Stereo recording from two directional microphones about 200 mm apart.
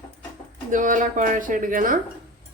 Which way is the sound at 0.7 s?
40° right (ahead or behind).